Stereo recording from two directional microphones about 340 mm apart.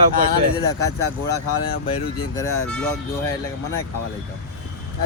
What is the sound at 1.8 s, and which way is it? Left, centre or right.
Speech, centre.